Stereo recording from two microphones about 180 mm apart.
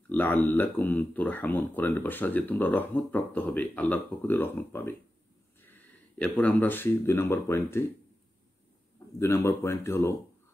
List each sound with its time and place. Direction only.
0.1 s speech: 10° left (ahead or behind)
9.2 s speech: 15° left (ahead or behind)